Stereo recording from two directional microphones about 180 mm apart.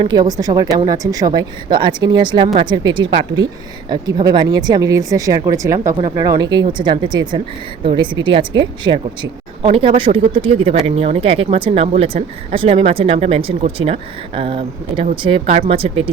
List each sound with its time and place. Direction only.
0.0 s speech: 25° right (ahead or behind)
5.9 s speech: 30° right (ahead or behind)
6.1 s speech: 20° right (ahead or behind)